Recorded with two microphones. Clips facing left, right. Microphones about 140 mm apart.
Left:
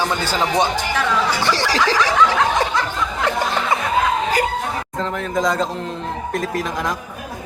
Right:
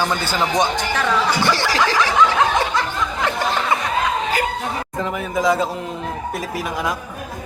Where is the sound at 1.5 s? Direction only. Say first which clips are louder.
Left 1 dB; 35° left (ahead or behind).